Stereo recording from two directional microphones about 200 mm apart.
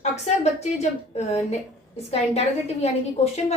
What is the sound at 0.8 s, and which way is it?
Speech, 35° left (ahead or behind).